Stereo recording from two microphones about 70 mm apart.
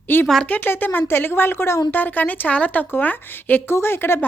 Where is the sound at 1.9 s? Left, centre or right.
Left.